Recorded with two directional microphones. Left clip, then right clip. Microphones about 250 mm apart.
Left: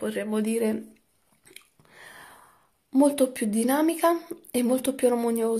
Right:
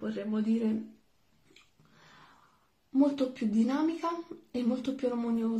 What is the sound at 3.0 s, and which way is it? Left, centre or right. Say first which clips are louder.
Speech: left 7 dB; left.